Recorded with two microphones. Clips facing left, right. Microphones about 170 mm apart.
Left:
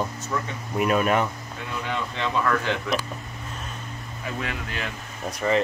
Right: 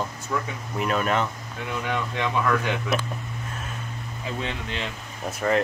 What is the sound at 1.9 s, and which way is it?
Speech, 10° right (ahead or behind).